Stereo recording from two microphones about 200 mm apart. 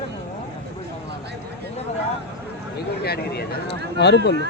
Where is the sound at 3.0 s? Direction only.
50° left (ahead or behind).